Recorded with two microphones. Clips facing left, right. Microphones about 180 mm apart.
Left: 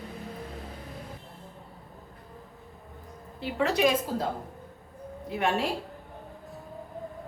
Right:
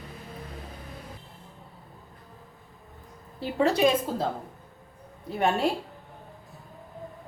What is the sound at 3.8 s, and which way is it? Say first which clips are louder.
Speech: right 1 dB; 30° right (ahead or behind).